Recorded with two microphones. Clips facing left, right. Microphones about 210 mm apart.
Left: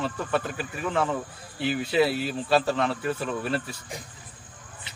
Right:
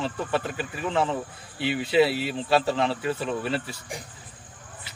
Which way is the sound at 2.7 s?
30° right (ahead or behind).